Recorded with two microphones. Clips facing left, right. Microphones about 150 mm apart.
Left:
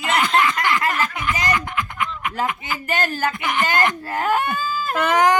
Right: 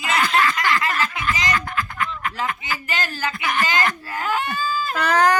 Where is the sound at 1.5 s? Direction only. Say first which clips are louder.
Left 1 dB; 20° left (ahead or behind).